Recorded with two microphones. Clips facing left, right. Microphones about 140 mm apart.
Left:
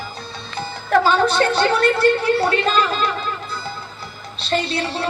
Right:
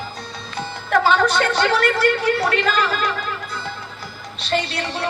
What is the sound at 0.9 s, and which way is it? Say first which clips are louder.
A woman's voice: left 1 dB; 30° left (ahead or behind).